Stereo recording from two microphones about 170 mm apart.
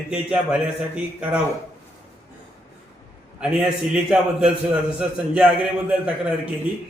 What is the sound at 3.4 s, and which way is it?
A man's voice, 5° right (ahead or behind).